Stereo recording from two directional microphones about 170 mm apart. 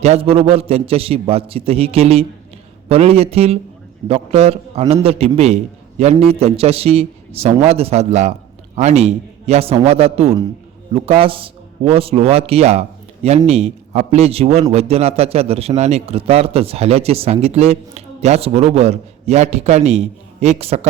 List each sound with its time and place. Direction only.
0.0 s a man's voice: 35° right (ahead or behind)